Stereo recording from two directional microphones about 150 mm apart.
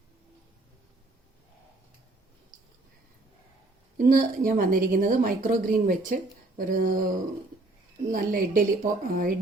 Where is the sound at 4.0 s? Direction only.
70° right (ahead or behind).